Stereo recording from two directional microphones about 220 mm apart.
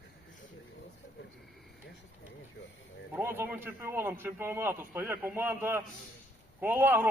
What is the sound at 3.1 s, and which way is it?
A man's voice, 10° right (ahead or behind).